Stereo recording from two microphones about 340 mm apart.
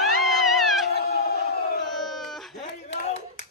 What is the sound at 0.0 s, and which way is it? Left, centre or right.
Cat, centre.